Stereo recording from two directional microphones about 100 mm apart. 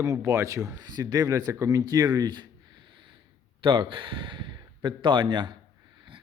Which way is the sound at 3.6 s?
55° right (ahead or behind).